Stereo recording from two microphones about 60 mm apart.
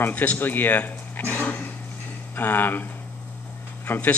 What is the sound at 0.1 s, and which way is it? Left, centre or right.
A man's voice, left.